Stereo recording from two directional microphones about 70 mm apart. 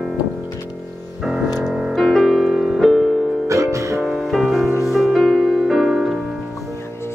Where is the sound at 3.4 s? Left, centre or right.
Right.